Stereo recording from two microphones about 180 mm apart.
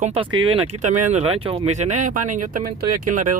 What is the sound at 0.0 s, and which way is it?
Speech, 30° right (ahead or behind).